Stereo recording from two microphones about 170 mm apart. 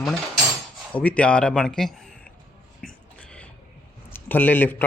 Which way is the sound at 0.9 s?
10° left (ahead or behind).